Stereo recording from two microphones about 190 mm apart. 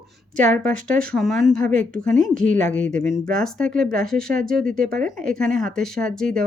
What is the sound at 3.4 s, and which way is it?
Speech, 5° left (ahead or behind).